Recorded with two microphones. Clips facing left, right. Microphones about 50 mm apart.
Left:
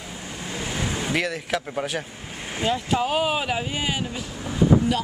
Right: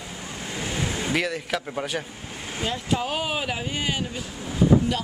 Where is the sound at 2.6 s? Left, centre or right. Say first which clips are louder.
Left 3 dB; centre.